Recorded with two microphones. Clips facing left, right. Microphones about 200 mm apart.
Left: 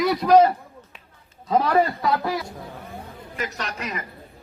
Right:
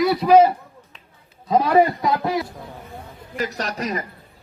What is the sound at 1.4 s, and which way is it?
Speech, 15° right (ahead or behind).